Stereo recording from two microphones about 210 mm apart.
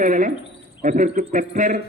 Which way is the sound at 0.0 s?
40° right (ahead or behind).